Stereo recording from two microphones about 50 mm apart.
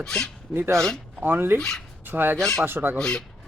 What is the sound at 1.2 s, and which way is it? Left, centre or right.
Speech, right.